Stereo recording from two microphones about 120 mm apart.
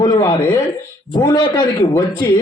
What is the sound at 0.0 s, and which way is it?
Speech, 35° left (ahead or behind).